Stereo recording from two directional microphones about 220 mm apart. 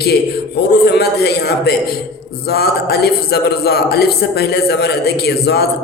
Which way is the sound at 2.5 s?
45° left (ahead or behind).